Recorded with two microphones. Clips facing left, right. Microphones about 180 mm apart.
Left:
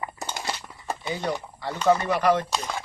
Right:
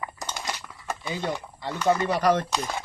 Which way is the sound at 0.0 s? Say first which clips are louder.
Left 2 dB; 30° left (ahead or behind).